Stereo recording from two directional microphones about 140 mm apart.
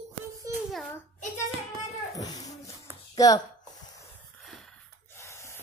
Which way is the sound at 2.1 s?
25° left (ahead or behind).